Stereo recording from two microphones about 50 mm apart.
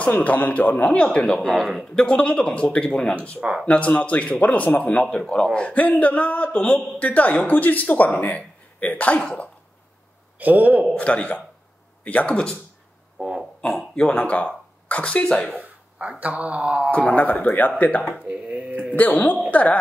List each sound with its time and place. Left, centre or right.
0.2 s speech: left
0.9 s a man's voice: centre
1.6 s a man's voice: centre
2.0 s a man's voice: centre
3.3 s speech: right
3.6 s a man's voice: left
10.4 s a man's voice: right
11.0 s speech: left
13.2 s a sound: centre
13.6 s speech: left
15.6 s speech: right
17.1 s speech: left
18.3 s a sound: right
18.9 s a woman's voice: left